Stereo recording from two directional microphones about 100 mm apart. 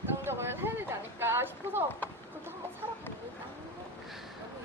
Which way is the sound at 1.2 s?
25° right (ahead or behind).